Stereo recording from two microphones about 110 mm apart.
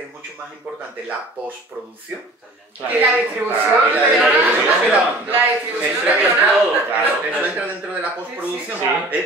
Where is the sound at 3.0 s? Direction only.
15° right (ahead or behind).